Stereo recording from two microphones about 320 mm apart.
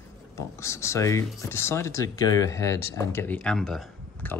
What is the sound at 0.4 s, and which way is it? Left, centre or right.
Speech, centre.